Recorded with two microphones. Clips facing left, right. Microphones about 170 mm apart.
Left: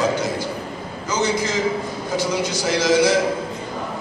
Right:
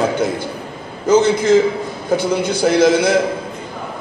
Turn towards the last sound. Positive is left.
turn(degrees=-55)  # may be behind; listen again after turning